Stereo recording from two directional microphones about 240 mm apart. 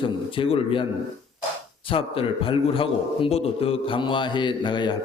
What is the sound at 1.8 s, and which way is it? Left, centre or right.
A man's voice, left.